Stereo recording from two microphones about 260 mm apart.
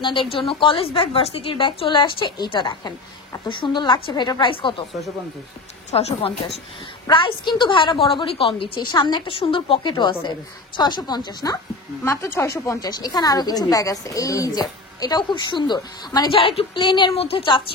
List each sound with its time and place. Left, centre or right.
0.0 s a woman's voice: centre
5.9 s a woman's voice: left